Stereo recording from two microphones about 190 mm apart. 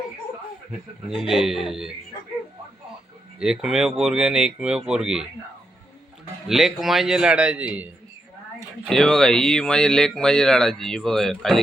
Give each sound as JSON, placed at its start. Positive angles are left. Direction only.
{"t": 1.1, "sound": "speech", "side_deg": 0}
{"t": 3.4, "sound": "speech", "side_deg": -5}
{"t": 6.5, "sound": "speech", "side_deg": 0}
{"t": 8.9, "sound": "speech", "side_deg": 0}